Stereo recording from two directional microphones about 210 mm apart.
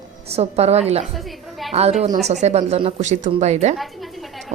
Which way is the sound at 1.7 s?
30° right (ahead or behind).